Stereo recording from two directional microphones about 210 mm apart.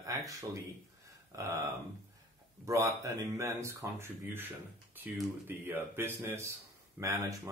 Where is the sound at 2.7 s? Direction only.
15° right (ahead or behind).